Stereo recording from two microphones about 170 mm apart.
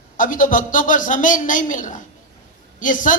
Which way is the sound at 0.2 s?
50° left (ahead or behind).